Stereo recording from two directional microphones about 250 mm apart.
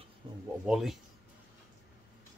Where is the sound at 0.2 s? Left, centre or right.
Centre.